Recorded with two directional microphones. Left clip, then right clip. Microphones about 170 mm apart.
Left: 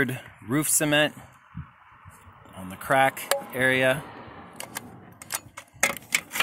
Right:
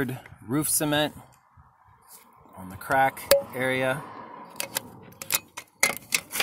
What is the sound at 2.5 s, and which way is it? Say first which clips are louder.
Speech: left 2 dB; 20° left (ahead or behind).